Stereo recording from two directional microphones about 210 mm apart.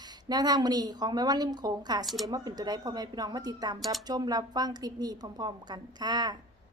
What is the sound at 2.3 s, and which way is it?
Speech, 20° right (ahead or behind).